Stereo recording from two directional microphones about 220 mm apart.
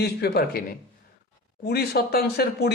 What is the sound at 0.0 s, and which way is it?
Speech, 45° left (ahead or behind).